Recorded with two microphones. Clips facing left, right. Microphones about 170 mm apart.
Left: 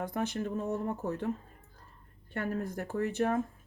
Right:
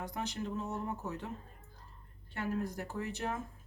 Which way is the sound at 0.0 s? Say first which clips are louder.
Left 6 dB; 55° left (ahead or behind).